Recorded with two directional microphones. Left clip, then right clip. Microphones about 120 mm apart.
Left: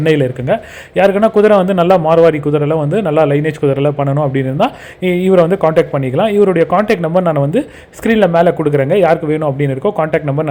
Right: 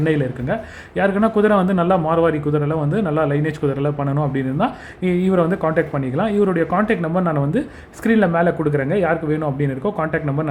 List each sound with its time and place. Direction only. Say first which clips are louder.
0.0 s a man's voice: left 7 dB; 30° left (ahead or behind)